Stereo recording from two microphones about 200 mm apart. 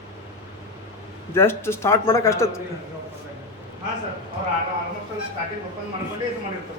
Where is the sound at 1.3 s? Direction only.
10° left (ahead or behind).